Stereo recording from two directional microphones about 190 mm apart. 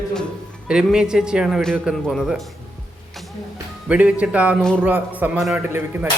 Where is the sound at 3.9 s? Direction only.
5° right (ahead or behind).